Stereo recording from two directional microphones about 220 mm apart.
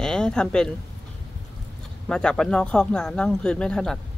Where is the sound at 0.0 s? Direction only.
5° left (ahead or behind).